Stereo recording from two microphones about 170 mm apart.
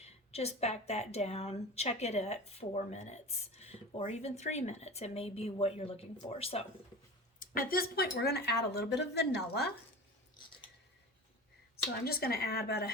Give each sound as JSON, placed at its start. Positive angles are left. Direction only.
{"t": 0.0, "sound": "speech", "side_deg": 40}
{"t": 7.3, "sound": "speech", "side_deg": 55}
{"t": 12.0, "sound": "speech", "side_deg": 65}